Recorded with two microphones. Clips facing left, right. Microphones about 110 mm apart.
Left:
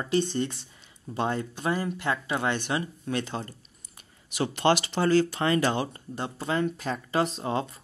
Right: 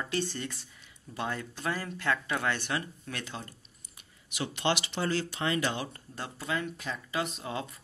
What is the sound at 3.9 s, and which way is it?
Speech, 40° left (ahead or behind).